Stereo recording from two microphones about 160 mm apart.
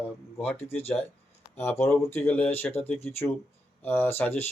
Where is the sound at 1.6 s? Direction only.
15° left (ahead or behind).